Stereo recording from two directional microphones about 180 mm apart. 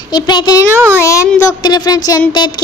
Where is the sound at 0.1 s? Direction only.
25° left (ahead or behind).